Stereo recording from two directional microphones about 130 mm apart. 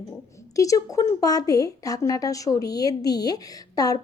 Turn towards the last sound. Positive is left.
turn(degrees=30)  # may be behind; listen again after turning